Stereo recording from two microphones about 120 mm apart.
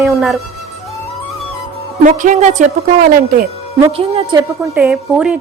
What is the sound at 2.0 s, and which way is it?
Speech, 90° right.